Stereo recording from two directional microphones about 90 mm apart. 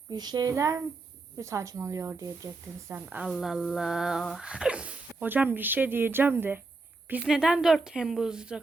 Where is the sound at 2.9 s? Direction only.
15° right (ahead or behind).